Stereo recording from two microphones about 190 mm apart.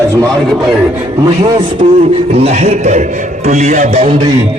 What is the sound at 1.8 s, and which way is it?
A man's voice, 25° right (ahead or behind).